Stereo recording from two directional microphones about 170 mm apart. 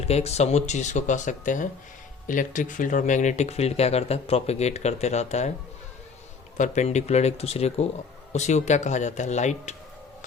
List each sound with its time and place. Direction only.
0.0 s speech: 40° left (ahead or behind)
6.6 s speech: 45° left (ahead or behind)